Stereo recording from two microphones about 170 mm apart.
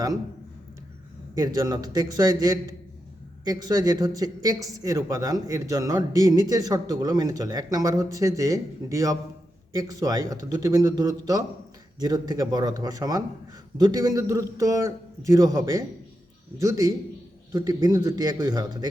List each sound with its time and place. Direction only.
1.4 s speech: 20° right (ahead or behind)